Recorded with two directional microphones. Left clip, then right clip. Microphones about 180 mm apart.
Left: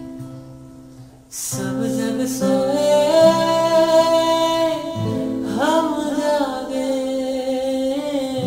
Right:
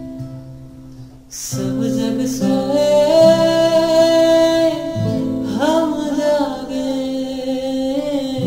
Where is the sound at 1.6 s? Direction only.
15° left (ahead or behind).